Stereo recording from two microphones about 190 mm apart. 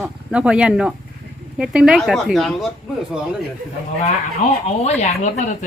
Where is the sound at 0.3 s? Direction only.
5° right (ahead or behind).